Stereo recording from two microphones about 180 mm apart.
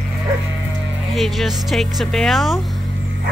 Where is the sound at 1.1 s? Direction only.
Centre (ahead or behind).